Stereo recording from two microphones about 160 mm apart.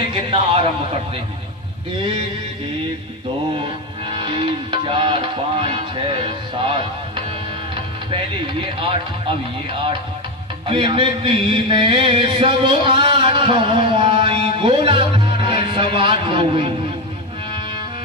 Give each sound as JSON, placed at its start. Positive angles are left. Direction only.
{"t": 0.1, "sound": "music", "side_deg": -35}
{"t": 3.6, "sound": "music", "side_deg": -35}
{"t": 8.8, "sound": "music", "side_deg": -35}